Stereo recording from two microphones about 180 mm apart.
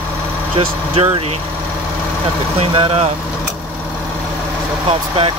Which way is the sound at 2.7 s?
30° right (ahead or behind).